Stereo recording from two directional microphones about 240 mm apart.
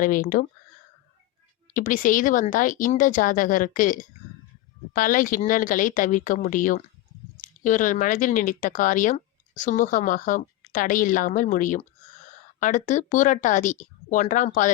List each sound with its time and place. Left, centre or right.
0.0 s speech: left
1.7 s speech: left